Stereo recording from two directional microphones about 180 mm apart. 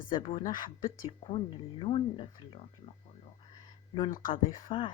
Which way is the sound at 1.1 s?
30° left (ahead or behind).